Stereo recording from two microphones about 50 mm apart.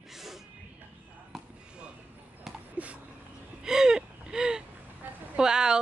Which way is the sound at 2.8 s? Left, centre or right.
Right.